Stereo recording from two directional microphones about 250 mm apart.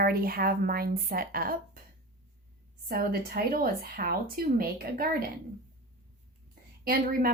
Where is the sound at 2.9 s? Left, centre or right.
Right.